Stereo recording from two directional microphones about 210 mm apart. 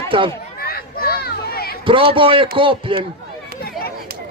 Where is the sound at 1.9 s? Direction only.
25° right (ahead or behind).